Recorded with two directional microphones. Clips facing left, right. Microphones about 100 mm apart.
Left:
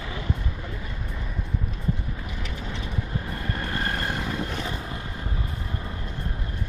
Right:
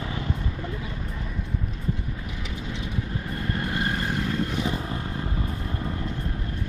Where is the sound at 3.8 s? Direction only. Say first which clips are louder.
Right 2 dB; centre (ahead or behind).